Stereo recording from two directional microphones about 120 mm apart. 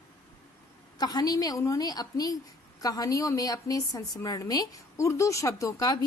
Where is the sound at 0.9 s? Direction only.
35° left (ahead or behind).